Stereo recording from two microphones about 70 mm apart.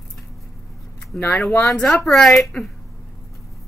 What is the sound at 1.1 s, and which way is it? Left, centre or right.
Speech, left.